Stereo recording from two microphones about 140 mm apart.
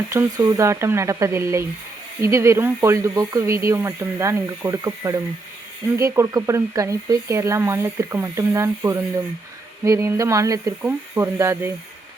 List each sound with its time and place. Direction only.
0.1 s speech: 25° right (ahead or behind)